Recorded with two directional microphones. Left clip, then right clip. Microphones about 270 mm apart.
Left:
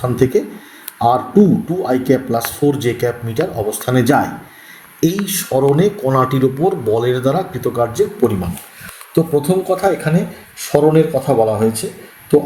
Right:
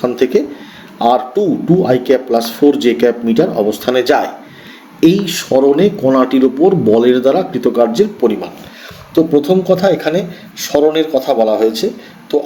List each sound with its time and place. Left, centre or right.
0.0 s speech: right